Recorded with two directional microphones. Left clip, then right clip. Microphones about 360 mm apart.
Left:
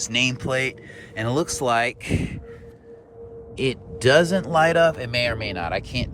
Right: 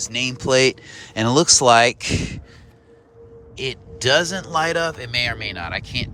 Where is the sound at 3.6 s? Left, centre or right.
Centre.